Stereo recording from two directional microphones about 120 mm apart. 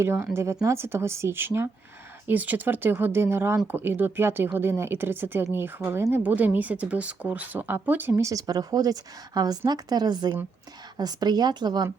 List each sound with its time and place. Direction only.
0.0 s speech: 20° right (ahead or behind); by 11.9 s 35° right (ahead or behind)